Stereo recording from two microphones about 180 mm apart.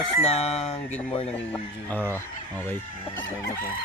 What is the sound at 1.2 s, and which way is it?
Speech, 5° left (ahead or behind).